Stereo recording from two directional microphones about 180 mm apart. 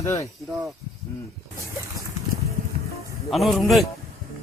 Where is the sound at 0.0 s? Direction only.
15° left (ahead or behind).